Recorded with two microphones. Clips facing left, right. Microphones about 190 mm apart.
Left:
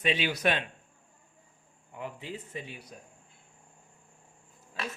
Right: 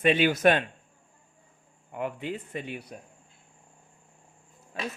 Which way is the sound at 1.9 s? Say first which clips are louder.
Right 7 dB; 60° right (ahead or behind).